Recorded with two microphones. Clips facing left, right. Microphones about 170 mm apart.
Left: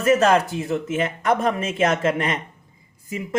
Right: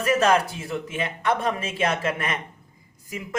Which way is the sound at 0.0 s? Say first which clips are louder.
Left 3 dB; 40° left (ahead or behind).